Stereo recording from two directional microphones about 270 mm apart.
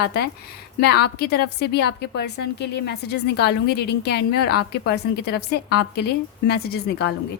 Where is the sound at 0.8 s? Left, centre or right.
Left.